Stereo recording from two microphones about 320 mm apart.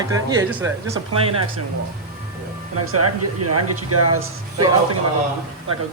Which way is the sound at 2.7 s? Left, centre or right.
Right.